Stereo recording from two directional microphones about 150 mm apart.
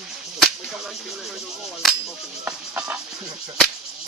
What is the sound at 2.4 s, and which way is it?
Speech, 10° right (ahead or behind).